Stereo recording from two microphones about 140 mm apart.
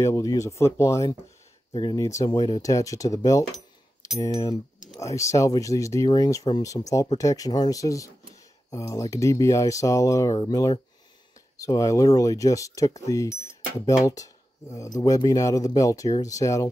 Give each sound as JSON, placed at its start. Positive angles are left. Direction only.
{"t": 0.0, "sound": "speech", "side_deg": 25}
{"t": 1.7, "sound": "speech", "side_deg": 35}
{"t": 2.0, "sound": "speech", "side_deg": 20}